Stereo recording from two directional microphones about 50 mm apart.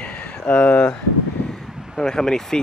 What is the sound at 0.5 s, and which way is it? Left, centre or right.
Speech, left.